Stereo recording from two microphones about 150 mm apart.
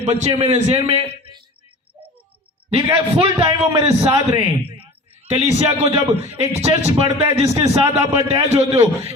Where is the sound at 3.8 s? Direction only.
20° right (ahead or behind).